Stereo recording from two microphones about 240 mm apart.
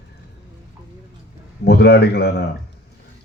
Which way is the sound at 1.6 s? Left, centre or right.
Left.